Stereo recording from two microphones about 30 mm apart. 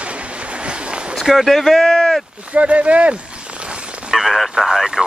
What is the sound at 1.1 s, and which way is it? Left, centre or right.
Speech, centre.